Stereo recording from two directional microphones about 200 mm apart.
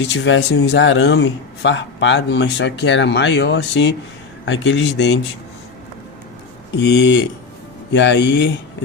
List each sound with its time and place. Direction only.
0.0 s a man's voice: 65° left (ahead or behind)
0.7 s a man's voice: 70° left (ahead or behind)
6.7 s a man's voice: 60° left (ahead or behind)